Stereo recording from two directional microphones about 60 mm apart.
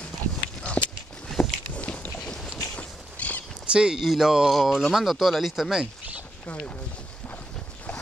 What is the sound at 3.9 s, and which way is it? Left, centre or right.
Speech, centre.